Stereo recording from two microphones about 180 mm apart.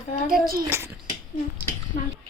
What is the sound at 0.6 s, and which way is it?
Speech, 15° right (ahead or behind).